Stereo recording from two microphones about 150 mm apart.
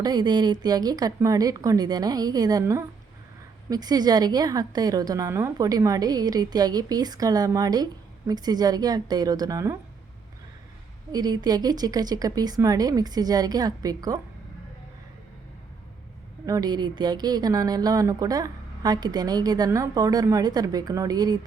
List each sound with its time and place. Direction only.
0.0 s speech: 25° right (ahead or behind)
11.1 s speech: 25° right (ahead or behind)
16.5 s speech: 25° right (ahead or behind)